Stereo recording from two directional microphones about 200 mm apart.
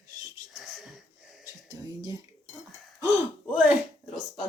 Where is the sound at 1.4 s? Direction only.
15° right (ahead or behind).